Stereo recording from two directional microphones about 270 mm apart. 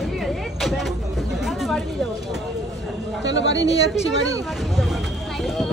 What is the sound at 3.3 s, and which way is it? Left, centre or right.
Speech, left.